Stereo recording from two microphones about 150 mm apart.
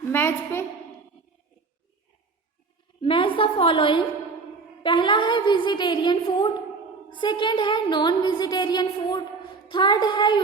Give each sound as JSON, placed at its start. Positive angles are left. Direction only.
{"t": 0.1, "sound": "a woman's voice", "side_deg": 15}
{"t": 3.0, "sound": "a woman's voice", "side_deg": 35}